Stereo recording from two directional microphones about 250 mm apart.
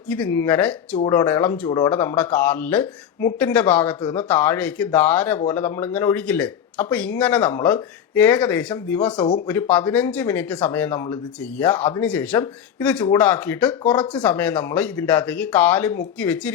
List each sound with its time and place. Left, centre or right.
0.1 s speech: centre
9.1 s speech: centre